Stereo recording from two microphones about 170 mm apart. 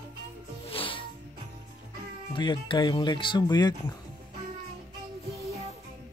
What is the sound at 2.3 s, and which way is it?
Speech, 30° left (ahead or behind).